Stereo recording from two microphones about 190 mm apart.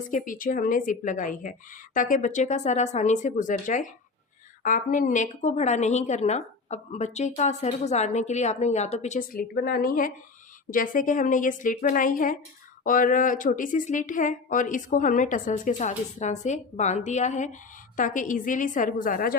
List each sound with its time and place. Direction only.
0.1 s a woman's voice: 45° left (ahead or behind)